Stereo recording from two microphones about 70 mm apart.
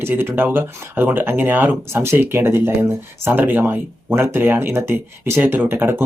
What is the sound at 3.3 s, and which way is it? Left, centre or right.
Speech, right.